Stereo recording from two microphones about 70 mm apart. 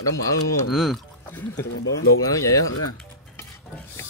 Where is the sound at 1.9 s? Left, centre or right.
Left.